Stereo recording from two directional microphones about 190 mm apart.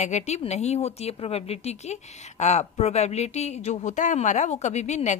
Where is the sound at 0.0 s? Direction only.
35° left (ahead or behind).